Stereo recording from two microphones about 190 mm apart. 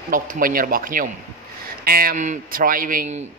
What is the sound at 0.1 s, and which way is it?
Speech, 45° right (ahead or behind).